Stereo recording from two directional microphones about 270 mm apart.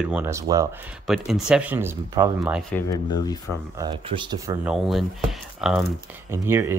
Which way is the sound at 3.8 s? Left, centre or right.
Centre.